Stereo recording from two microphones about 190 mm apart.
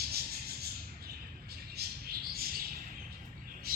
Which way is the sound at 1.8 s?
55° right (ahead or behind).